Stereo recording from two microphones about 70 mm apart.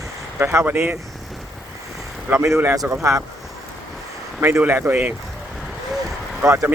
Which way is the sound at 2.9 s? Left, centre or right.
Right.